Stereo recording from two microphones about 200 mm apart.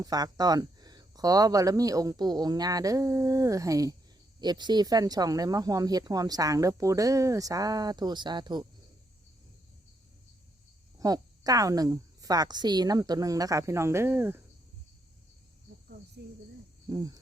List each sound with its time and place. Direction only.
0.0 s speech: 20° right (ahead or behind)
11.0 s speech: 20° right (ahead or behind)
16.2 s speech: 55° right (ahead or behind)
16.9 s speech: 20° right (ahead or behind)